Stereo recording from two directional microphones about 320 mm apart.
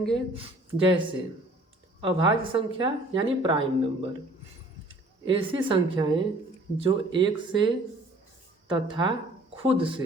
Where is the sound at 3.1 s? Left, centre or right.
Centre.